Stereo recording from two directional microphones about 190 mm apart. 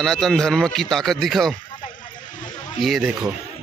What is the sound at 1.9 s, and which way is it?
Vehicle, 45° left (ahead or behind).